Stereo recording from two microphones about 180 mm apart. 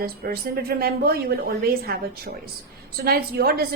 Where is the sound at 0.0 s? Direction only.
60° right (ahead or behind).